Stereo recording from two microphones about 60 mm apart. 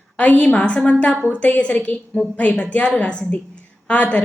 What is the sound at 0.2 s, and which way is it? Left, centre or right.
A woman's voice, left.